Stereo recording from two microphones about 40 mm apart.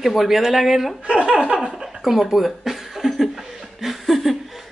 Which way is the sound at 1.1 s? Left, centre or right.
Right.